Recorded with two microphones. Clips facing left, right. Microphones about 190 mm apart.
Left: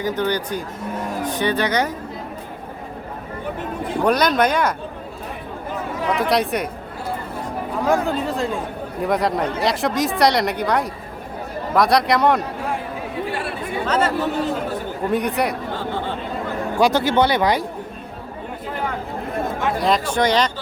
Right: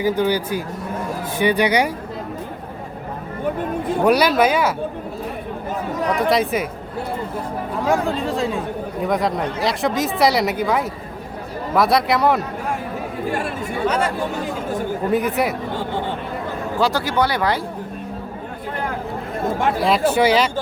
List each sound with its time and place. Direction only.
0.0 s speech: 10° right (ahead or behind)
4.0 s speech: 10° right (ahead or behind)
6.1 s speech: centre (ahead or behind)
7.8 s speech: centre (ahead or behind)
13.2 s speech: 45° right (ahead or behind)
13.8 s speech: 10° right (ahead or behind)
15.1 s speech: centre (ahead or behind)
15.7 s speech: 15° right (ahead or behind)
16.7 s speech: 20° left (ahead or behind)
19.8 s speech: 5° right (ahead or behind)